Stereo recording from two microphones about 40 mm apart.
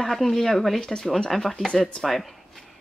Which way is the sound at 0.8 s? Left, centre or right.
Centre.